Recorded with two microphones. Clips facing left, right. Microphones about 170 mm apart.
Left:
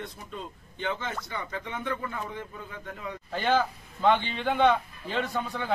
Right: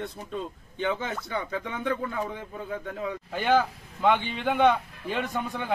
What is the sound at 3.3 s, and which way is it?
Speech, 10° right (ahead or behind).